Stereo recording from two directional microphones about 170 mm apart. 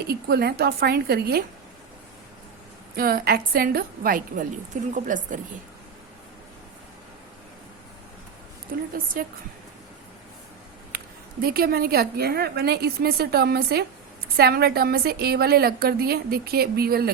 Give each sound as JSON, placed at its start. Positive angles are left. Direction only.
{"t": 0.1, "sound": "a woman's voice", "side_deg": -70}
{"t": 2.9, "sound": "a woman's voice", "side_deg": -60}
{"t": 8.7, "sound": "a woman's voice", "side_deg": -60}
{"t": 11.4, "sound": "a woman's voice", "side_deg": -65}